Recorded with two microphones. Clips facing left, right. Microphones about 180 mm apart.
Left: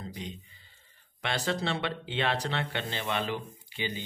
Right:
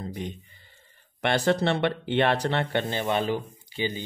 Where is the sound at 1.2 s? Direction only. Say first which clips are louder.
Right 8 dB; 60° right (ahead or behind).